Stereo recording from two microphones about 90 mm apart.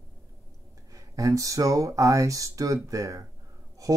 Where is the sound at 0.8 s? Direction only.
40° right (ahead or behind).